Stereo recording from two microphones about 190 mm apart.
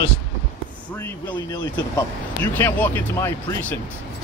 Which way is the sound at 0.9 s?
10° left (ahead or behind).